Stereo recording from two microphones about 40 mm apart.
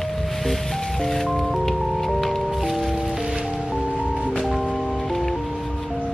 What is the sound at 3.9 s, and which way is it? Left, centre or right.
Music, right.